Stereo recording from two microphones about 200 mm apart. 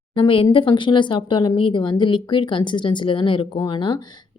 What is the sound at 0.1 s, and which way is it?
Speech, 25° left (ahead or behind).